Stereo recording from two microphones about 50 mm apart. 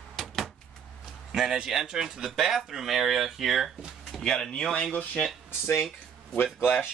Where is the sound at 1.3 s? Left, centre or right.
Centre.